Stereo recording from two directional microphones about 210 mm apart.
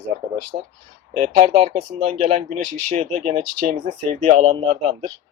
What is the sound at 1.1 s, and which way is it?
Speech, 30° right (ahead or behind).